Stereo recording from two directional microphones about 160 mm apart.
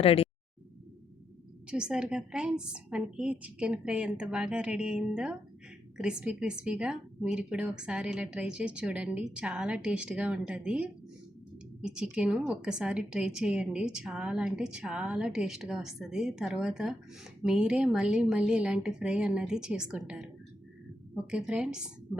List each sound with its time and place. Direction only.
0.0 s speech: 40° left (ahead or behind)
1.6 s a woman's voice: 5° right (ahead or behind)